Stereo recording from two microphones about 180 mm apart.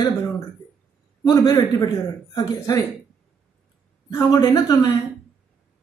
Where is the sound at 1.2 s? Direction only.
20° left (ahead or behind).